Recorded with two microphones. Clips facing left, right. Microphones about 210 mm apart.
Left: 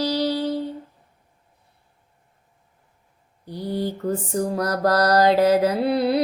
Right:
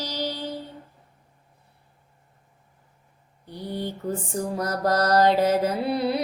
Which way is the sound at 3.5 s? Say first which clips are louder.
Left 5 dB; 35° left (ahead or behind).